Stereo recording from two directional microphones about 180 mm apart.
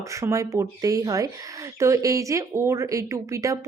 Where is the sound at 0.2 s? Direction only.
15° right (ahead or behind).